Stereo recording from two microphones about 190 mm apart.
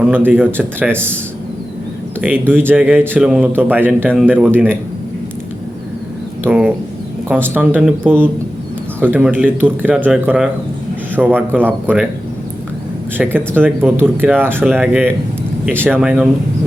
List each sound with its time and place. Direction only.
0.3 s a man's voice: 10° right (ahead or behind)
2.5 s a man's voice: 10° right (ahead or behind)
6.4 s a man's voice: 5° right (ahead or behind)
13.1 s a man's voice: 10° right (ahead or behind)